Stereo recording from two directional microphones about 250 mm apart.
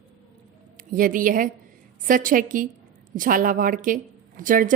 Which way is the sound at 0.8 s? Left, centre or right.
Right.